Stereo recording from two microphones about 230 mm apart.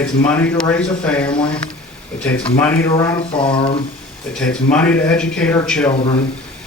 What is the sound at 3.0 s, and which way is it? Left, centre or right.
Speech, centre.